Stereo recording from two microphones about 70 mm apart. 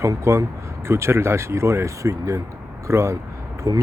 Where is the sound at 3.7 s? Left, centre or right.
Right.